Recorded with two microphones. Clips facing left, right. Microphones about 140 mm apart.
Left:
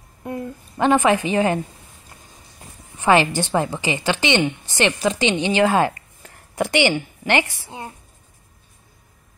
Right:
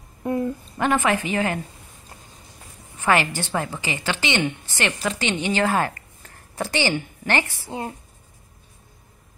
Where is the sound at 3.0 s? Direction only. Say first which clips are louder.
Left 4 dB; 20° left (ahead or behind).